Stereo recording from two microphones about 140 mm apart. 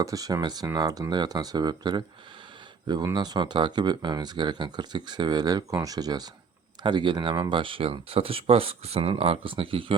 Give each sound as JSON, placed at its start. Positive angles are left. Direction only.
{"t": 0.0, "sound": "speech", "side_deg": -25}